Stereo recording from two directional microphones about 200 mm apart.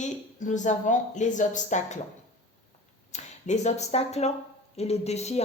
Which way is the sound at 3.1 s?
35° left (ahead or behind).